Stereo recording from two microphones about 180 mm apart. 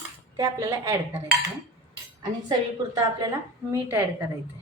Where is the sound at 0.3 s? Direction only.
20° right (ahead or behind).